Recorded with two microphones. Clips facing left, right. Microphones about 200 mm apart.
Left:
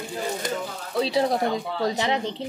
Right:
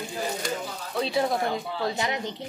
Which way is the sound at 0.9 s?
35° left (ahead or behind).